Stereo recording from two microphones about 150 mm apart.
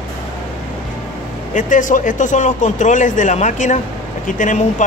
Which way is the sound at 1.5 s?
60° left (ahead or behind).